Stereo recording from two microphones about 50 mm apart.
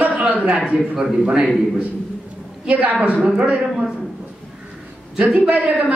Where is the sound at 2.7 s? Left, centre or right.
Right.